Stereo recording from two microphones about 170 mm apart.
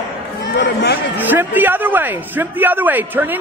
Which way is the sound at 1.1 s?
10° right (ahead or behind).